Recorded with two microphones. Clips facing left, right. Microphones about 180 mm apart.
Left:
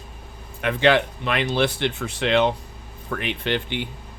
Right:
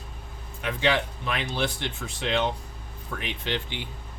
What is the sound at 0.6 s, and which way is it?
Speech, 65° left (ahead or behind).